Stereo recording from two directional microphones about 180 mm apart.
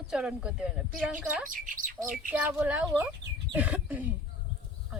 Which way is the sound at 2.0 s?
10° right (ahead or behind).